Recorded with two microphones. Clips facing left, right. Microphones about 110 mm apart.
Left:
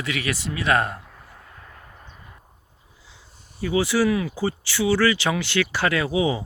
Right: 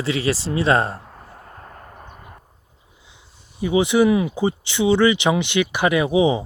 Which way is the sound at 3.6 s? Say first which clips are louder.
Right 4 dB; 20° right (ahead or behind).